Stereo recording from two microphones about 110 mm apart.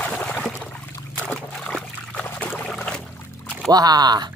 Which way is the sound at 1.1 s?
10° left (ahead or behind).